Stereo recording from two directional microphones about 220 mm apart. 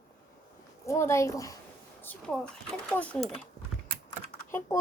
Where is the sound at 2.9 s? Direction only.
5° left (ahead or behind).